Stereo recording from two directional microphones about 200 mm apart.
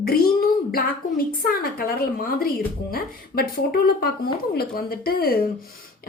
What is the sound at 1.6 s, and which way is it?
A woman's voice, 45° left (ahead or behind).